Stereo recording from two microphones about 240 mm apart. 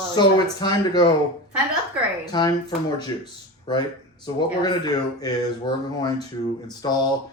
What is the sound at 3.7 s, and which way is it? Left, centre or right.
Speech, centre.